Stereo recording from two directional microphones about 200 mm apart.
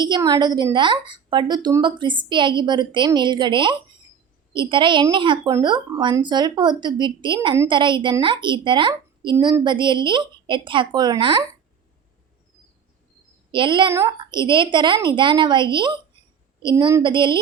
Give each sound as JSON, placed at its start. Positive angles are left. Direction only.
{"t": 0.0, "sound": "a woman's voice", "side_deg": -20}
{"t": 13.5, "sound": "a woman's voice", "side_deg": -25}